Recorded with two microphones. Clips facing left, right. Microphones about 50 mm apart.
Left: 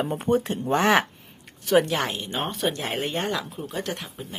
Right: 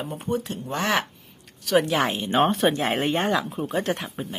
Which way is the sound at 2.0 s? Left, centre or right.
Centre.